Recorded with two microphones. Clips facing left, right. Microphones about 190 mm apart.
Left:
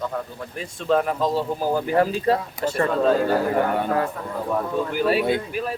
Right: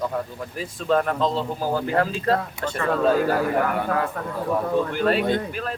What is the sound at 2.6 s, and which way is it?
A man's voice, 35° left (ahead or behind).